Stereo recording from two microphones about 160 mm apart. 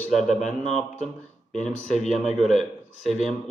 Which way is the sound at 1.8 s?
45° left (ahead or behind).